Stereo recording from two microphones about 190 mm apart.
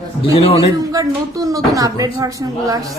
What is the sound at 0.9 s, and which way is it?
Speech, 20° right (ahead or behind).